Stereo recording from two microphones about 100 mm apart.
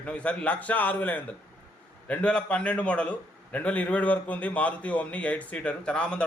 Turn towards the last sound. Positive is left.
turn(degrees=10)  # may be behind; listen again after turning